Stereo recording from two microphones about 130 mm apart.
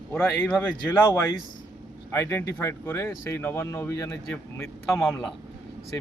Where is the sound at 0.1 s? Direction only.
15° left (ahead or behind).